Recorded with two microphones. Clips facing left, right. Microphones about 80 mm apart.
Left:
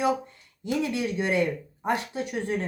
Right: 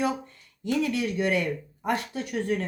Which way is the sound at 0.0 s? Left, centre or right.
Centre.